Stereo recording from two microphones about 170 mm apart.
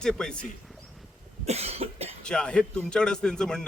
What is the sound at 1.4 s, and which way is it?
Cough, 40° right (ahead or behind).